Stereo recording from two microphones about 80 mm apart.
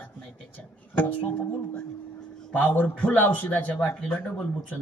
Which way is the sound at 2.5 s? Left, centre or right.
Centre.